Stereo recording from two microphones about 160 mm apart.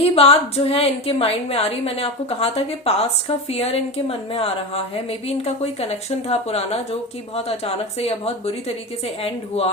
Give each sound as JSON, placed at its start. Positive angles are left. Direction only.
{"t": 0.0, "sound": "a woman's voice", "side_deg": 35}